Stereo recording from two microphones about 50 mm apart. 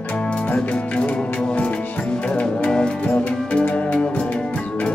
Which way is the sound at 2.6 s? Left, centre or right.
Centre.